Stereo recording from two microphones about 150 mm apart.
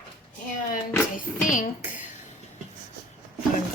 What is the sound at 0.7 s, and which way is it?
Speech, 60° left (ahead or behind).